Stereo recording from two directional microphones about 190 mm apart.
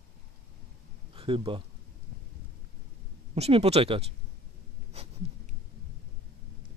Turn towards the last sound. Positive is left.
turn(degrees=-30)  # may be behind; listen again after turning